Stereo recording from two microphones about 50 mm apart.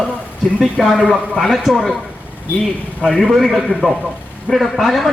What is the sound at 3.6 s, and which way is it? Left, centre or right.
Speech, right.